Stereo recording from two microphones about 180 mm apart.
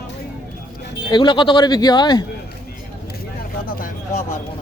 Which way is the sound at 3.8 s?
40° left (ahead or behind).